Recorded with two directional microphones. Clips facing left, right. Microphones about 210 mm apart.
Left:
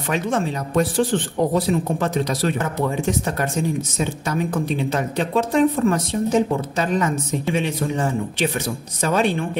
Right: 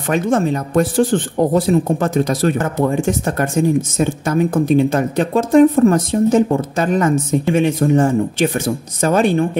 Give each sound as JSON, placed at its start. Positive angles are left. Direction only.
{"t": 0.1, "sound": "speech", "side_deg": -50}